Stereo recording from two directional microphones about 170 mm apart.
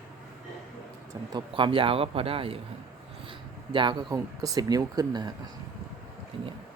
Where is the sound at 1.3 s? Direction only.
30° right (ahead or behind).